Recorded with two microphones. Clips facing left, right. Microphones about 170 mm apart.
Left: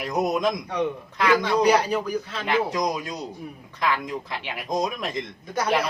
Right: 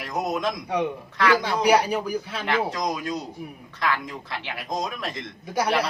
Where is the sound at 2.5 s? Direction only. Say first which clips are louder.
Left 2 dB; 20° left (ahead or behind).